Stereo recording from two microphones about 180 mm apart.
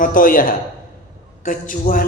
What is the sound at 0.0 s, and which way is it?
A man's voice, 50° left (ahead or behind).